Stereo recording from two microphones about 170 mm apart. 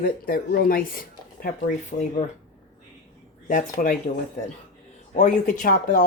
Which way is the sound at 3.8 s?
55° left (ahead or behind).